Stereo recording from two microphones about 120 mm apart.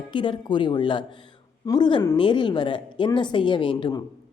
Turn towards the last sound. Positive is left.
turn(degrees=40)  # may be behind; listen again after turning